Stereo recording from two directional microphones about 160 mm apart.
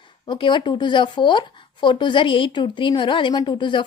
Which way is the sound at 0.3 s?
30° left (ahead or behind).